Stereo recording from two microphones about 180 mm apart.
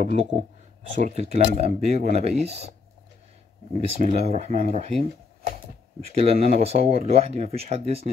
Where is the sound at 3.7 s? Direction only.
35° right (ahead or behind).